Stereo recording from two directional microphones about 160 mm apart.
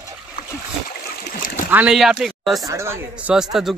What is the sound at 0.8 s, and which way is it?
Splash, 60° left (ahead or behind).